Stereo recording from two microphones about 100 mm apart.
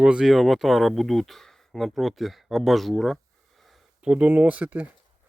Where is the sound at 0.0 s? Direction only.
10° right (ahead or behind).